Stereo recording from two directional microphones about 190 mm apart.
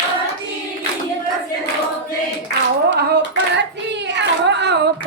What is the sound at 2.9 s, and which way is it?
Hands, 65° right (ahead or behind).